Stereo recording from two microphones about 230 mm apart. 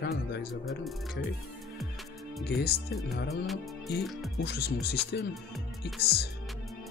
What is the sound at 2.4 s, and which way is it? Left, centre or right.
Speech, left.